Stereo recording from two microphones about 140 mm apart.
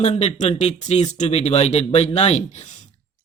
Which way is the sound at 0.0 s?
50° left (ahead or behind).